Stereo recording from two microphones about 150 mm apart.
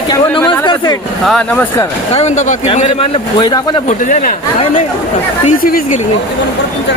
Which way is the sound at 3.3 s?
30° left (ahead or behind).